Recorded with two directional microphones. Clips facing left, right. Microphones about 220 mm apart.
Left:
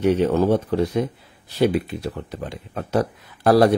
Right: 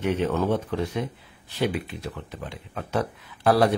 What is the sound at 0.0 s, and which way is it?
Speech, 35° left (ahead or behind).